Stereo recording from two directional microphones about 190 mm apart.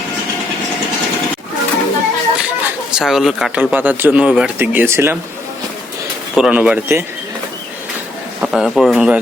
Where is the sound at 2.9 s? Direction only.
5° right (ahead or behind).